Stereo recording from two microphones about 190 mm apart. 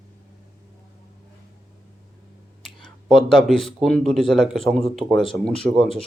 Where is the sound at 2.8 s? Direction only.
5° left (ahead or behind).